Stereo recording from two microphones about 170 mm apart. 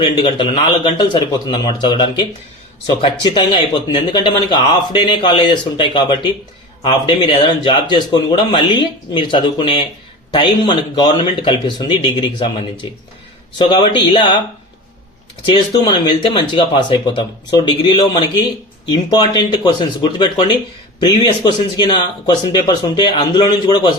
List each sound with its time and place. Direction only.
0.0 s speech: 30° left (ahead or behind)
15.4 s speech: 25° left (ahead or behind)